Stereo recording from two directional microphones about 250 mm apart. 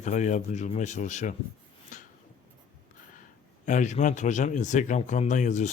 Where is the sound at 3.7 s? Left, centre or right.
Left.